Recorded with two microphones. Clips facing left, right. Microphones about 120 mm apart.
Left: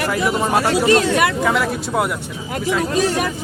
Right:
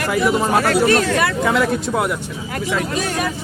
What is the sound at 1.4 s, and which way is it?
Speech, centre (ahead or behind).